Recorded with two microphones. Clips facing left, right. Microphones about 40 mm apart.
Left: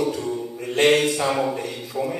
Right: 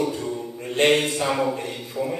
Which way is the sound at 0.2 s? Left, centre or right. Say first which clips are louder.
Left 2 dB; centre.